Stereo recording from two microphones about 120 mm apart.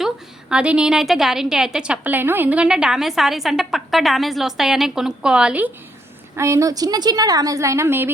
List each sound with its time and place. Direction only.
0.0 s a woman's voice: 5° right (ahead or behind)
6.3 s a woman's voice: 20° right (ahead or behind)